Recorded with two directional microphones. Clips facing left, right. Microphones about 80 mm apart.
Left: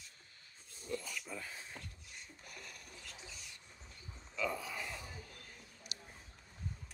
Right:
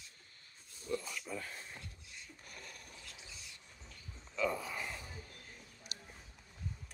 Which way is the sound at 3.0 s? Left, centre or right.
Right.